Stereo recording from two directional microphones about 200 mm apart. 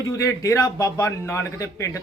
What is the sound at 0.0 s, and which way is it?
A man's voice, 15° left (ahead or behind).